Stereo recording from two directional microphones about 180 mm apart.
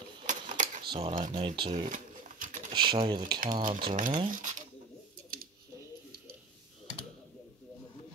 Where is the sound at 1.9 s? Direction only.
45° right (ahead or behind).